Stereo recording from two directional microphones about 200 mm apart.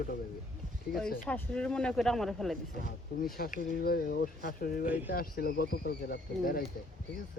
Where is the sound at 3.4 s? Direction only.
45° left (ahead or behind).